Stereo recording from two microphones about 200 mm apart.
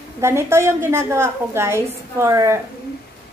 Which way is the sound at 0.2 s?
15° right (ahead or behind).